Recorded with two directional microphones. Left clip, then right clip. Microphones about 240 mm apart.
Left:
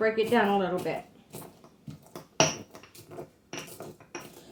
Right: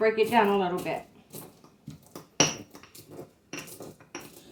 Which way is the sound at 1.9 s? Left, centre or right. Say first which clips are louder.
Even; centre.